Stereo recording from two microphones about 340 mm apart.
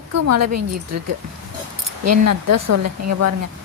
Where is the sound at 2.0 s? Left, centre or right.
Right.